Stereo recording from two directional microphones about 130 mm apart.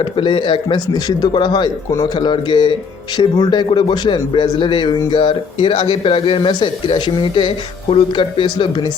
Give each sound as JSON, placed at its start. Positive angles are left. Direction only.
{"t": 0.0, "sound": "speech", "side_deg": 40}